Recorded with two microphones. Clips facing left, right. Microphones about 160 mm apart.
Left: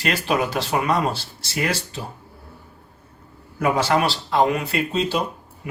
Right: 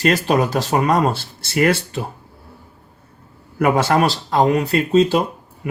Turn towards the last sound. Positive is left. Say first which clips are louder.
# right 7 dB
turn(degrees=-45)  # may be behind; listen again after turning